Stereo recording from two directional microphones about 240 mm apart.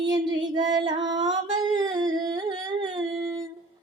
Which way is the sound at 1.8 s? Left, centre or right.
Centre.